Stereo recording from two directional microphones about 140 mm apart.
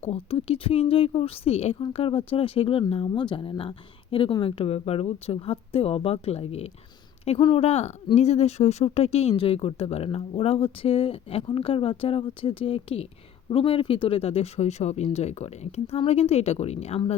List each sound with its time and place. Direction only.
0.0 s speech: 45° left (ahead or behind)